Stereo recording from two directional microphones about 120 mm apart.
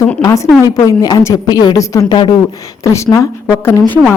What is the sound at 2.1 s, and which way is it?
Speech, 40° left (ahead or behind).